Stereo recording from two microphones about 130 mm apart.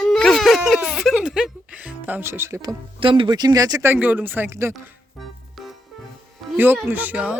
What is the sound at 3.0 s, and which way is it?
Speech, 40° right (ahead or behind).